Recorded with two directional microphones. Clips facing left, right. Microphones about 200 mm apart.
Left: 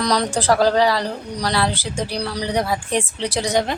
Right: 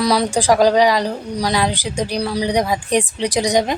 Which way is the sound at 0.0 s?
10° right (ahead or behind).